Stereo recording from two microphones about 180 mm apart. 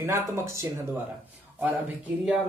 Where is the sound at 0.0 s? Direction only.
15° right (ahead or behind).